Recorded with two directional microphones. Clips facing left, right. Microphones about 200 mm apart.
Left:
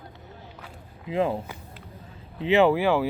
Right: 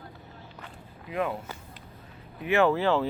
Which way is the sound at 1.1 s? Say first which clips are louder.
Left 5 dB; 30° left (ahead or behind).